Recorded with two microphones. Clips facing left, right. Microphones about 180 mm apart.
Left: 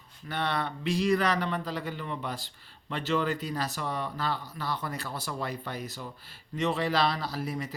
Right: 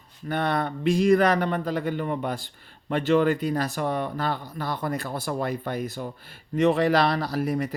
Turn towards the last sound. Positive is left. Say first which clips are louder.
# right 8 dB
turn(degrees=-60)  # may be behind; listen again after turning